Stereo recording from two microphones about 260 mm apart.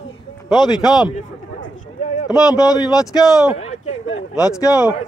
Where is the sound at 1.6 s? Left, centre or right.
Left.